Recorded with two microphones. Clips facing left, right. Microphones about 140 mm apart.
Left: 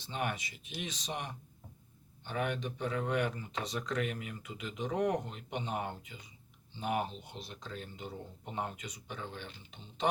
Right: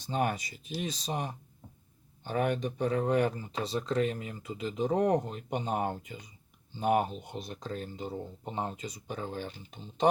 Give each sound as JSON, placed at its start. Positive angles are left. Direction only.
{"t": 0.0, "sound": "speech", "side_deg": -40}